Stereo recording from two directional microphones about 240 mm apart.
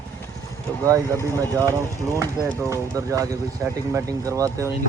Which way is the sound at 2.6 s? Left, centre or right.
Centre.